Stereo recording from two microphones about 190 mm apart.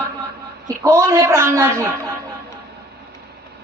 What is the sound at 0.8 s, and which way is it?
A woman's voice, 15° right (ahead or behind).